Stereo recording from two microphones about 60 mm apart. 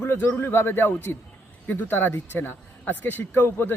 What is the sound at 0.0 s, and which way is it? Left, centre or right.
Speech, left.